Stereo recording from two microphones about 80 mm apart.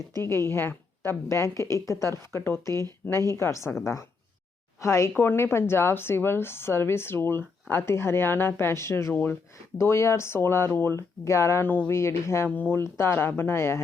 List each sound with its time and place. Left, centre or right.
0.2 s a woman's voice: left
11.6 s speech: left
11.9 s a woman's voice: left
12.5 s a woman's voice: left